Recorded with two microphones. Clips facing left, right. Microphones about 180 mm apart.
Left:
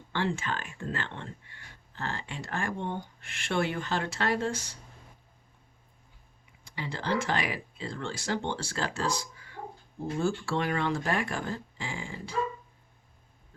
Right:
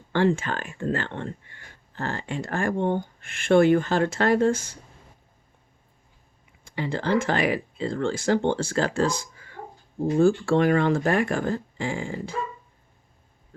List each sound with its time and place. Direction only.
0.1 s speech: 50° right (ahead or behind)
6.7 s speech: 50° right (ahead or behind)